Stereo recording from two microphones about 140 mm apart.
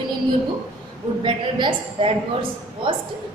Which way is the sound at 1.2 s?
35° right (ahead or behind).